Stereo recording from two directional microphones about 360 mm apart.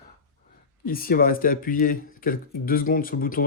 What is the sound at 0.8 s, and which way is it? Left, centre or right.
Speech, left.